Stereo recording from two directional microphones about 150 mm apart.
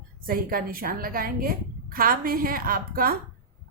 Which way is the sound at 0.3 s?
75° right (ahead or behind).